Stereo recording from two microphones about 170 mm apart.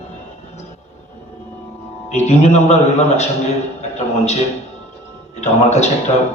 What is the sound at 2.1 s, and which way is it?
A man's voice, 40° left (ahead or behind).